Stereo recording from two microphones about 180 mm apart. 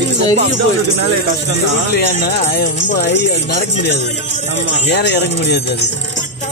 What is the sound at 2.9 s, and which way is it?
Speech, 75° left (ahead or behind).